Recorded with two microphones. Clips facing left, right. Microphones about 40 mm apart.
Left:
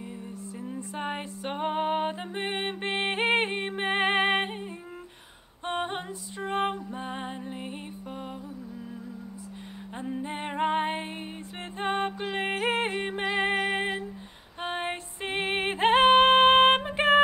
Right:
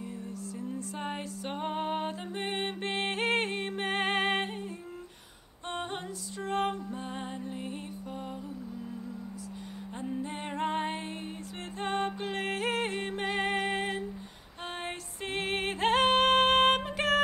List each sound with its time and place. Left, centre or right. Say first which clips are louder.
0.6 s music: left 3 dB; left
5.7 s female singing: left 5 dB; left
6.4 s music: left 2 dB; left
9.9 s female singing: left 3 dB; left
11.8 s music: left 3 dB; left